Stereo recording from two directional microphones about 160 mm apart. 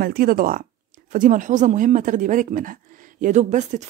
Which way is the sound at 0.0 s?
70° right (ahead or behind).